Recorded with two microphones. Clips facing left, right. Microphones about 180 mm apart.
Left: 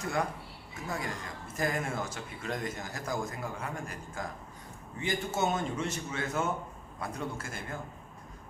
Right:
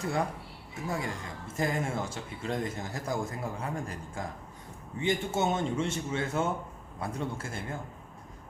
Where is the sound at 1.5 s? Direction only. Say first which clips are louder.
Right 2 dB; 25° right (ahead or behind).